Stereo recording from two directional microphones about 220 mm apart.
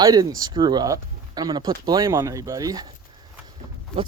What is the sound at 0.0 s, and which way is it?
Speech, 15° right (ahead or behind).